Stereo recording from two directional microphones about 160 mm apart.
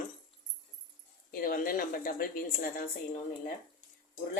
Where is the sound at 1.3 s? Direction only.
65° left (ahead or behind).